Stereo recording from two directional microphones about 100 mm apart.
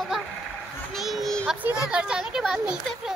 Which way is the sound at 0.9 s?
Centre (ahead or behind).